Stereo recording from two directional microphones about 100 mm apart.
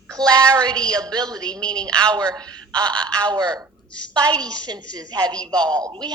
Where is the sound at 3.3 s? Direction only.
40° right (ahead or behind).